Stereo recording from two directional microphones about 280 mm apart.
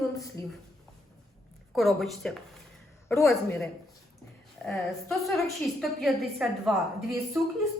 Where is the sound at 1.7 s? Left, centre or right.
Centre.